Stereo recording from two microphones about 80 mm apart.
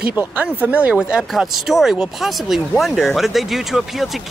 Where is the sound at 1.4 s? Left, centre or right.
Centre.